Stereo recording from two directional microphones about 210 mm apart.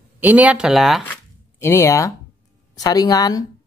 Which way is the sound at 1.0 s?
10° left (ahead or behind).